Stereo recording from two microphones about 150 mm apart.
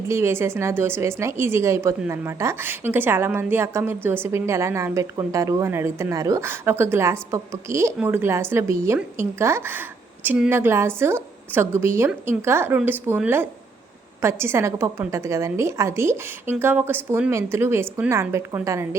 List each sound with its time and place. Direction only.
0.1 s speech: 15° right (ahead or behind)
10.2 s a woman's voice: 5° right (ahead or behind)
10.5 s speech: 15° right (ahead or behind)